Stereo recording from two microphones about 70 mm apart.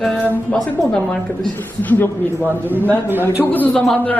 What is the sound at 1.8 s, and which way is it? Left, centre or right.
Speech, left.